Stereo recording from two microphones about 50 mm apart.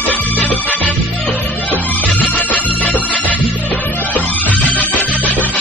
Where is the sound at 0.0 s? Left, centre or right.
Left.